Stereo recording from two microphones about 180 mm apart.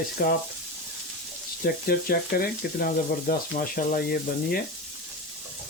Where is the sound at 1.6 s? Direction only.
55° left (ahead or behind).